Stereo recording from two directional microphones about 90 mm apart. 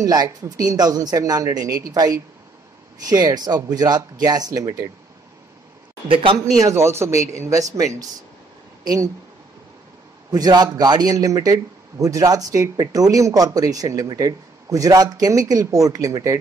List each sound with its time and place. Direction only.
0.0 s a man's voice: 45° right (ahead or behind)
6.0 s speech: 80° right
6.6 s speech: 30° right (ahead or behind)
10.3 s a man's voice: 45° right (ahead or behind)